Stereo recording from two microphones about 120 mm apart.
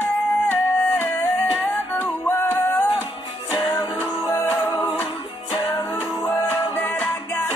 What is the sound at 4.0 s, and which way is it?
Music, 15° left (ahead or behind).